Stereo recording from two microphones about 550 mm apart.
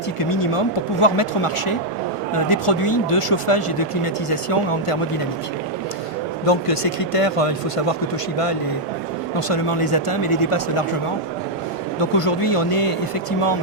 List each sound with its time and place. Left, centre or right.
0.2 s speech: left
6.4 s speech: left
9.5 s speech: left
11.9 s speech: left